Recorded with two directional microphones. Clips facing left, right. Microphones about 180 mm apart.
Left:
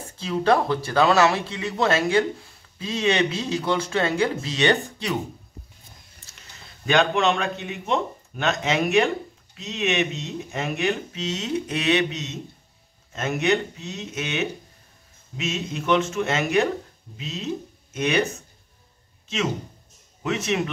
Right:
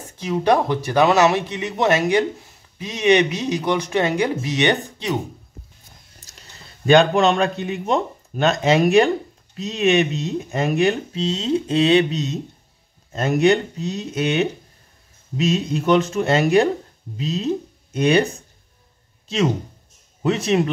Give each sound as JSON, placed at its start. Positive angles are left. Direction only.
{"t": 0.2, "sound": "speech", "side_deg": -15}
{"t": 6.9, "sound": "speech", "side_deg": -35}
{"t": 20.2, "sound": "speech", "side_deg": -35}